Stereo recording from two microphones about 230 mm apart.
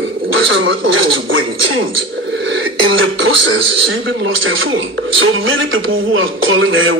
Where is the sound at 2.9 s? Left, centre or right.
Right.